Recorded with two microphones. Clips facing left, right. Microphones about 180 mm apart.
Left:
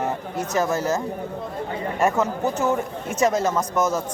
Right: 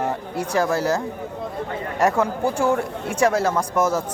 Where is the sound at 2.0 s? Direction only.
10° right (ahead or behind).